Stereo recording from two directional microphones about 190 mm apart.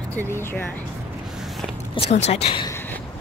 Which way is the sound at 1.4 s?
Centre (ahead or behind).